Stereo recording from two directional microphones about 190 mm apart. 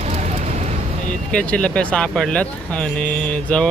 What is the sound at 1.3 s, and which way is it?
Speech, 5° left (ahead or behind).